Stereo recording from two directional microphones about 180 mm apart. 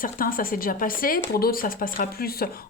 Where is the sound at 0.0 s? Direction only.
50° left (ahead or behind).